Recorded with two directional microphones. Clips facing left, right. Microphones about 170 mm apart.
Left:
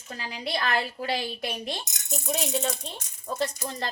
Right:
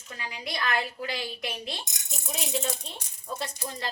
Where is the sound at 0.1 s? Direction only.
30° left (ahead or behind).